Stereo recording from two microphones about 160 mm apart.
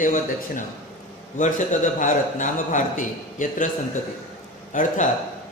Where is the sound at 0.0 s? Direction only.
55° left (ahead or behind).